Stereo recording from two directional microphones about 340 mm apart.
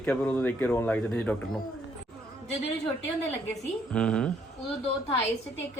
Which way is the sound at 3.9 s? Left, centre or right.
Centre.